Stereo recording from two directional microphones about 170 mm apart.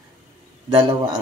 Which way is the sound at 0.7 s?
25° right (ahead or behind).